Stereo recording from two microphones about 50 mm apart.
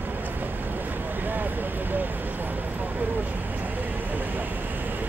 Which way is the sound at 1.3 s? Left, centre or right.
Right.